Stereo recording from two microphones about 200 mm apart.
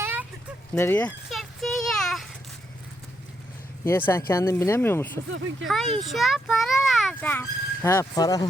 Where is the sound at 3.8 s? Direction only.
10° left (ahead or behind).